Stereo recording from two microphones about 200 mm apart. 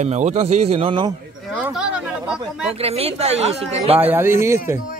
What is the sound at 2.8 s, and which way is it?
Speech, 30° right (ahead or behind).